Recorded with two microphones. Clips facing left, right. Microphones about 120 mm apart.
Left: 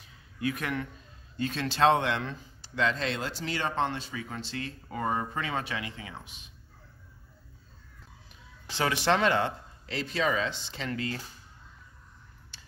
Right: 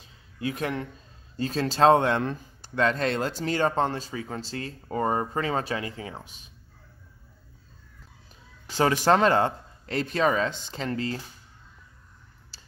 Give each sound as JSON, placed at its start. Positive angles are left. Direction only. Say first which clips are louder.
{"t": 0.0, "sound": "a sound", "louder": "even", "side_deg": -30}
{"t": 1.3, "sound": "speech", "louder": "right 4 dB", "side_deg": -35}
{"t": 8.7, "sound": "speech", "louder": "right 5 dB", "side_deg": -40}
{"t": 12.5, "sound": "tick-tock", "louder": "even", "side_deg": -35}